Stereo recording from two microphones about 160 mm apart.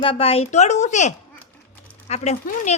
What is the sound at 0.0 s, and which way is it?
Speech, 35° left (ahead or behind).